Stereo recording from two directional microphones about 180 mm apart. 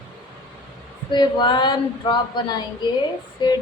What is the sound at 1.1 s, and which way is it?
Speech, 25° left (ahead or behind).